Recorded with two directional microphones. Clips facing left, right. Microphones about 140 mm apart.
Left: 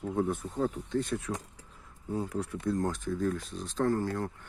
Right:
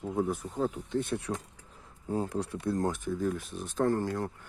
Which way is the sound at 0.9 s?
25° right (ahead or behind).